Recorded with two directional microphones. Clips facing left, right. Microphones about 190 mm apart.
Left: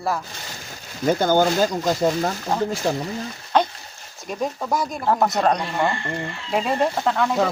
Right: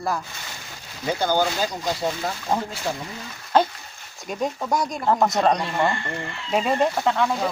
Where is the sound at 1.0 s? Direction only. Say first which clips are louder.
Left 4 dB; 45° left (ahead or behind).